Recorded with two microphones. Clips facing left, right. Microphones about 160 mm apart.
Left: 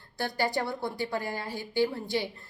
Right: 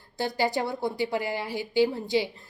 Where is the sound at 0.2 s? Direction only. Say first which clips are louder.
Right 3 dB; 20° right (ahead or behind).